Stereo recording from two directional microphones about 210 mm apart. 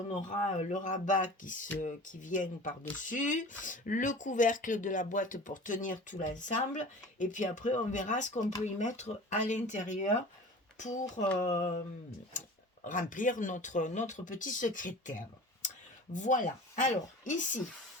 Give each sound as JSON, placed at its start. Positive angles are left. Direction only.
{"t": 0.3, "sound": "speech", "side_deg": 35}
{"t": 12.8, "sound": "speech", "side_deg": 40}
{"t": 15.6, "sound": "a sound", "side_deg": 35}
{"t": 16.1, "sound": "speech", "side_deg": 35}